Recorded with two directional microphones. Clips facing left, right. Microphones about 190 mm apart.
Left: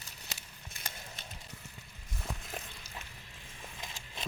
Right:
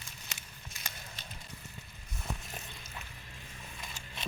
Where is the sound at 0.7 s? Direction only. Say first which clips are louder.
Left 1 dB; 55° left (ahead or behind).